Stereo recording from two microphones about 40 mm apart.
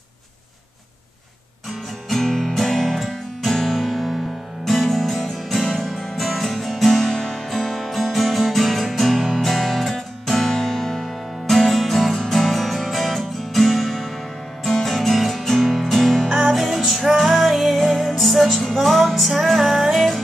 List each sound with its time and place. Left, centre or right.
2.0 s music: centre
10.2 s music: centre
16.4 s music: centre